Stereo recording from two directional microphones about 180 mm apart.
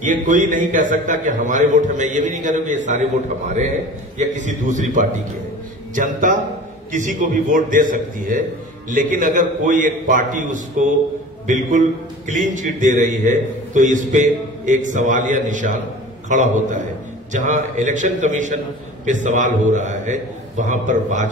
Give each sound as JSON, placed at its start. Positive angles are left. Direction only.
{"t": 0.0, "sound": "a man's voice", "side_deg": -45}
{"t": 4.3, "sound": "a man's voice", "side_deg": -45}